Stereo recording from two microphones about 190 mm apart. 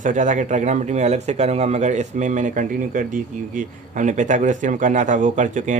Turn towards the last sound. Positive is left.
turn(degrees=-40)  # may be behind; listen again after turning